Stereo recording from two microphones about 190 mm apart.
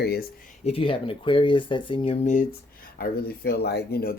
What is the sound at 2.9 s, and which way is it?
Speech, 55° left (ahead or behind).